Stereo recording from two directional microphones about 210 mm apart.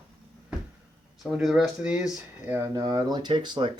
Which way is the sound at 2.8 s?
20° right (ahead or behind).